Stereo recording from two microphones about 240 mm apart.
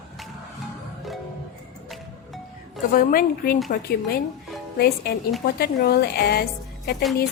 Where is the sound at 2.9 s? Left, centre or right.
Left.